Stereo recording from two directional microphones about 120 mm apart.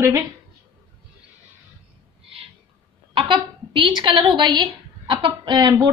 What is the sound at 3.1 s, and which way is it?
A woman's voice, 45° right (ahead or behind).